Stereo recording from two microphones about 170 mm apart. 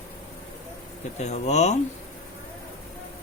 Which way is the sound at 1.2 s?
40° left (ahead or behind).